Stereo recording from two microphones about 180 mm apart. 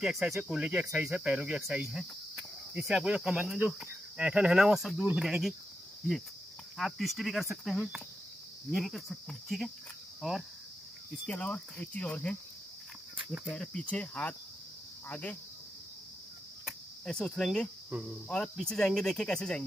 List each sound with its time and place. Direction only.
0.0 s speech: centre (ahead or behind)
6.8 s speech: centre (ahead or behind)
11.2 s cricket: 5° left (ahead or behind)
13.2 s cricket: 10° right (ahead or behind)
13.5 s cricket: 5° left (ahead or behind)
16.6 s cricket: centre (ahead or behind)
17.9 s speech: centre (ahead or behind)